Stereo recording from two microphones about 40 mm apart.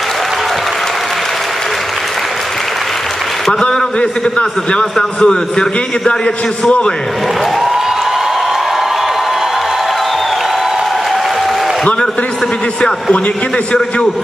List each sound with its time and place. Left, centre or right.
3.6 s a man's voice: left